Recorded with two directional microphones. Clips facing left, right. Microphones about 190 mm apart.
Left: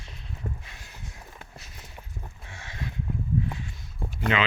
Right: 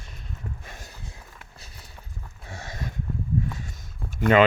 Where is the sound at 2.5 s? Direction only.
40° right (ahead or behind).